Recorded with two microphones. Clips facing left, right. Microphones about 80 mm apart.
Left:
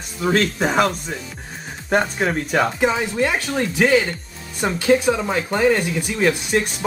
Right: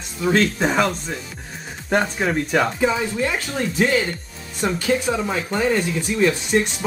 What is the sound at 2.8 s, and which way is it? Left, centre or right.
Speech, left.